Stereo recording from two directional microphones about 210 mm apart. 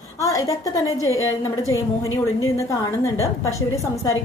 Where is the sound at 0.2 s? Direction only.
15° left (ahead or behind).